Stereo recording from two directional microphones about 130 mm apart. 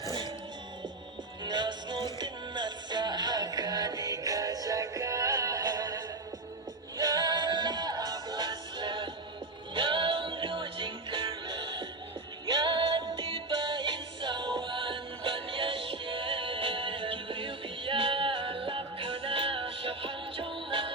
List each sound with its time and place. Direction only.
1.5 s music: 35° right (ahead or behind)